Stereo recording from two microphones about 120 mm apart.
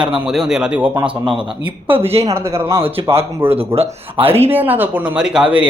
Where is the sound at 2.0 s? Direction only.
55° right (ahead or behind).